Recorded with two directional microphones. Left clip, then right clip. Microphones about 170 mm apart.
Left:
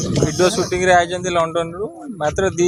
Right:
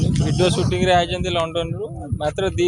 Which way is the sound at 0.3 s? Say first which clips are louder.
Left 1 dB; 30° left (ahead or behind).